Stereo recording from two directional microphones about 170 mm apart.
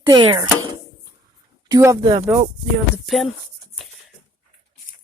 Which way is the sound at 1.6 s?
20° right (ahead or behind).